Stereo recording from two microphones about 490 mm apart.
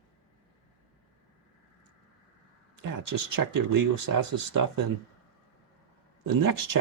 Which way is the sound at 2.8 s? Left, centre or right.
Right.